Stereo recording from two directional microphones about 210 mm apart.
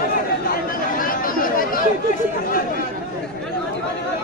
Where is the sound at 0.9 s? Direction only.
40° left (ahead or behind).